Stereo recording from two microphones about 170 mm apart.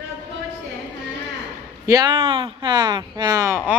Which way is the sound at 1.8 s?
20° right (ahead or behind).